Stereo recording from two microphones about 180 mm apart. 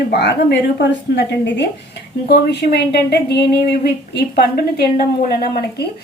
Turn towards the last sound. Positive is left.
turn(degrees=60)  # may be behind; listen again after turning